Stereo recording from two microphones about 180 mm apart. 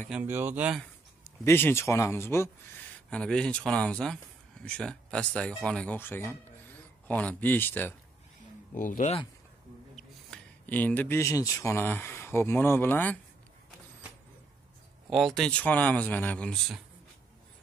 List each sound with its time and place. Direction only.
0.1 s speech: 10° right (ahead or behind)
1.2 s speech: 15° left (ahead or behind)
8.7 s speech: 45° left (ahead or behind)
9.9 s speech: 5° left (ahead or behind)
15.0 s speech: centre (ahead or behind)